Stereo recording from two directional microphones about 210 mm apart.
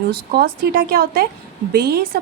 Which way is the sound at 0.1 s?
50° right (ahead or behind).